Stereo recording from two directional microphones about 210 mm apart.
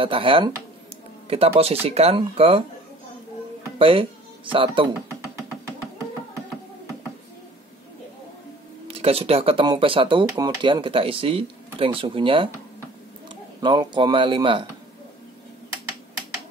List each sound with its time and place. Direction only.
0.0 s speech: 25° right (ahead or behind)
3.7 s speech: 25° right (ahead or behind)
8.8 s speech: 25° right (ahead or behind)